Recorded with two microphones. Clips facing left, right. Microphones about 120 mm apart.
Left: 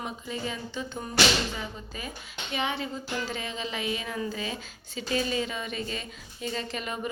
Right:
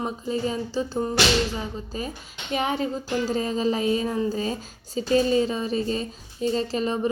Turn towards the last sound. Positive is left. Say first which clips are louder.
# right 9 dB
turn(degrees=-35)  # may be behind; listen again after turning